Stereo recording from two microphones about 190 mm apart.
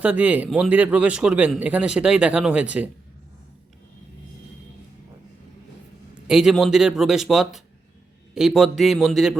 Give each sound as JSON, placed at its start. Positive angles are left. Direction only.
{"t": 0.0, "sound": "a man's voice", "side_deg": -10}
{"t": 6.2, "sound": "speech", "side_deg": -5}